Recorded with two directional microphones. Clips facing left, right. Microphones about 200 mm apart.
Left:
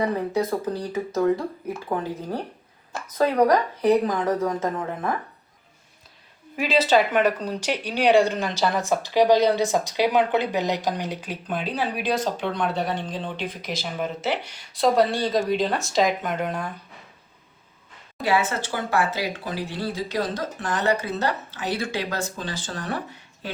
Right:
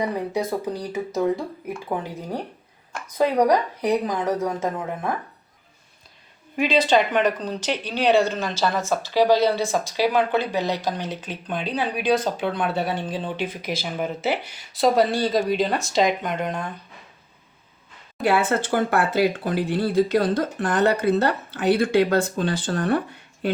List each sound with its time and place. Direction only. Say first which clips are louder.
0.3 s a woman's voice: left 1 dB; 10° right (ahead or behind)
3.2 s a woman's voice: even; 10° right (ahead or behind)
6.6 s speech: right 1 dB; 5° left (ahead or behind)
18.3 s speech: right 3 dB; 55° right (ahead or behind)